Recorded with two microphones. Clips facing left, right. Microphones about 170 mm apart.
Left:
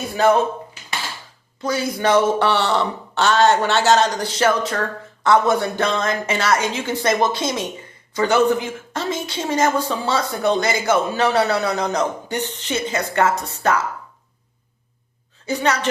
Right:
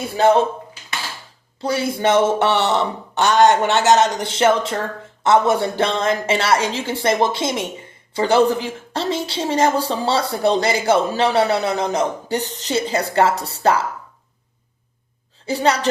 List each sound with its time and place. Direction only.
1.6 s a woman's voice: 30° right (ahead or behind)
12.4 s a woman's voice: 35° right (ahead or behind)
15.4 s a woman's voice: 30° right (ahead or behind)